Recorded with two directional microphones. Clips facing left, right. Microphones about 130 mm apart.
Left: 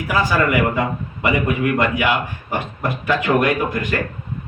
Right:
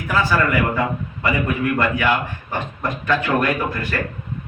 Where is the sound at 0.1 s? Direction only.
15° left (ahead or behind).